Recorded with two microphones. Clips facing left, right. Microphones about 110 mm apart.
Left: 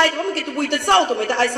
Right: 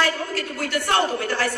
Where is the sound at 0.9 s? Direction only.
25° left (ahead or behind).